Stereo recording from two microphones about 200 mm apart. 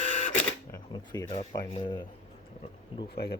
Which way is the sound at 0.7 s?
15° left (ahead or behind).